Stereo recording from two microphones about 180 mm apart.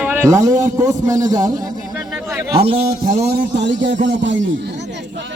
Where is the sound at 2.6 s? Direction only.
35° right (ahead or behind).